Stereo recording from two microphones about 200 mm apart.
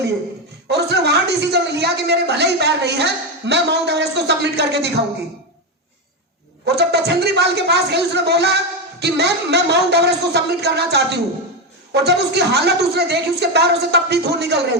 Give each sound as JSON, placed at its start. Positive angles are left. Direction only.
{"t": 0.7, "sound": "a woman's voice", "side_deg": -55}
{"t": 6.7, "sound": "a woman's voice", "side_deg": -55}